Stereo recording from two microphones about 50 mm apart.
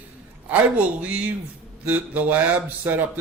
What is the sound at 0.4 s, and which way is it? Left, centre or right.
A man's voice, right.